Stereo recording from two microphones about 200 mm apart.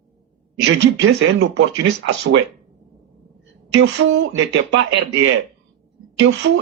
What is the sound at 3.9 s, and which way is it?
Speech, 65° right (ahead or behind).